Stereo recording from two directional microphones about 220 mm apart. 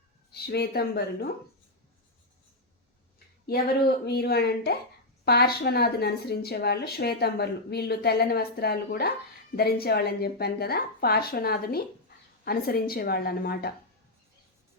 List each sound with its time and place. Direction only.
0.3 s speech: 45° left (ahead or behind)
3.4 s speech: 45° left (ahead or behind)